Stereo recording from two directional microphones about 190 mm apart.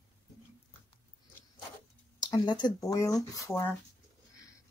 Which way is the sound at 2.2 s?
20° left (ahead or behind).